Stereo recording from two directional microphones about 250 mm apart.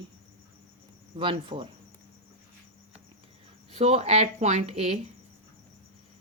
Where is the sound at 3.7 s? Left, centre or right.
Right.